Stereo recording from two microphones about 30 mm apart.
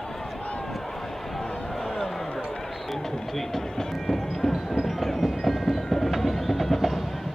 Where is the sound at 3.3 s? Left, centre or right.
Centre.